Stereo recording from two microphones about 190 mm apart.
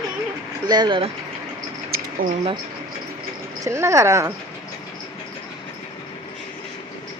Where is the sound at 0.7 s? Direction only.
25° right (ahead or behind).